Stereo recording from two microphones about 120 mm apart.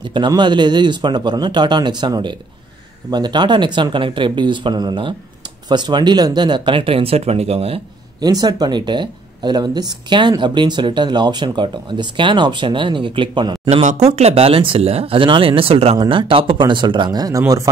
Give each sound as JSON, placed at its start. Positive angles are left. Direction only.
{"t": 0.0, "sound": "a sound", "side_deg": -40}
{"t": 0.3, "sound": "speech", "side_deg": -40}
{"t": 8.2, "sound": "speech", "side_deg": -35}
{"t": 14.1, "sound": "speech", "side_deg": -55}